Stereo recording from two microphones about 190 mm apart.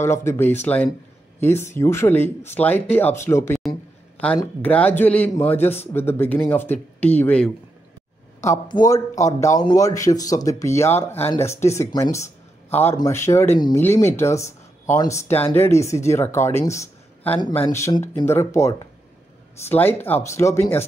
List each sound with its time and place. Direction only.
0.0 s speech: 15° left (ahead or behind)
8.4 s speech: 20° left (ahead or behind)